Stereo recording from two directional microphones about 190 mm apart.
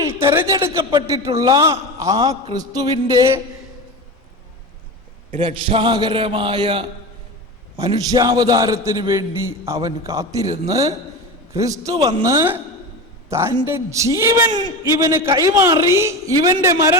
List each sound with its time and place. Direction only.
0.0 s a man's voice: 15° right (ahead or behind)
5.4 s a man's voice: 30° right (ahead or behind)